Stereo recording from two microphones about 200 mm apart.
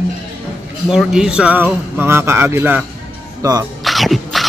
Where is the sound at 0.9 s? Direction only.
5° right (ahead or behind).